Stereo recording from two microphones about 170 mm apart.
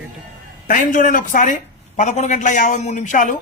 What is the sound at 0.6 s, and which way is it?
A man's voice, 50° left (ahead or behind).